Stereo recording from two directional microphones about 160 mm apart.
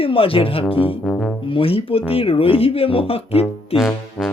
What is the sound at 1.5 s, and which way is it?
Speech, 35° left (ahead or behind).